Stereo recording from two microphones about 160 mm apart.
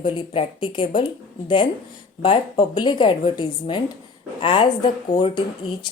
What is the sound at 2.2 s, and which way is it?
A woman's voice, 30° left (ahead or behind).